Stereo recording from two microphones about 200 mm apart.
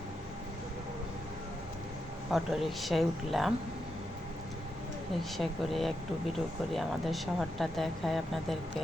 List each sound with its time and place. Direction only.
2.3 s speech: centre (ahead or behind)
5.4 s speech: centre (ahead or behind)